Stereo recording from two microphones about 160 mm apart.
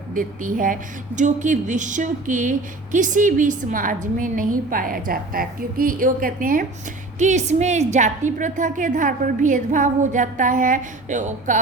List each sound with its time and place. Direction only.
0.1 s a woman's voice: 55° right (ahead or behind)
7.2 s a woman's voice: 50° right (ahead or behind)